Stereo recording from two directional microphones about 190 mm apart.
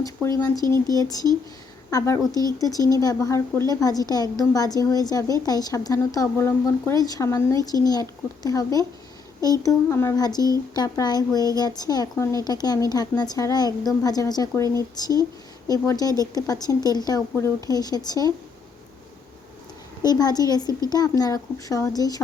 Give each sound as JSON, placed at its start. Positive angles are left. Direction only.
{"t": 0.6, "sound": "speech", "side_deg": -20}
{"t": 0.9, "sound": "a woman's voice", "side_deg": 20}
{"t": 20.0, "sound": "a woman's voice", "side_deg": 20}